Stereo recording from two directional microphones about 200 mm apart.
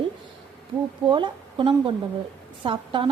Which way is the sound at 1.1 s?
25° right (ahead or behind).